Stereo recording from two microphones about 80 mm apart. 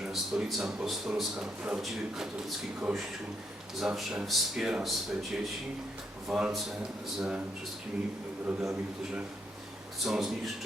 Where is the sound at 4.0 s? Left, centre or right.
Centre.